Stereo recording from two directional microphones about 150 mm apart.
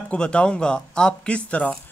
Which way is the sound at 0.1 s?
5° left (ahead or behind).